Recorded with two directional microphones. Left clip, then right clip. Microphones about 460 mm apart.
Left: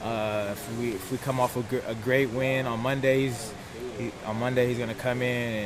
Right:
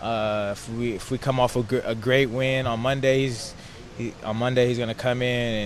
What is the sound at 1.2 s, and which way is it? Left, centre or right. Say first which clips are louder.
Speech: right 5 dB; right.